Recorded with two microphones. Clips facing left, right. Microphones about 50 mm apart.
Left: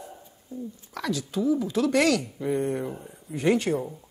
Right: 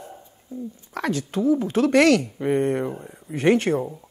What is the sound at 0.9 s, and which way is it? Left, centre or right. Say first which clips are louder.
Speech: right 4 dB; right.